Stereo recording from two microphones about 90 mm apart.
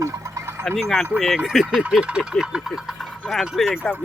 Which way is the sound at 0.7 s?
Centre (ahead or behind).